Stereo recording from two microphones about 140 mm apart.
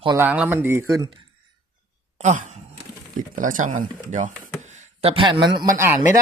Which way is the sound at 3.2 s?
70° right (ahead or behind).